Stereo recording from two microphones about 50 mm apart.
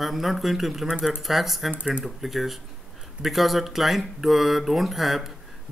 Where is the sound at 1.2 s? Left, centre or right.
Centre.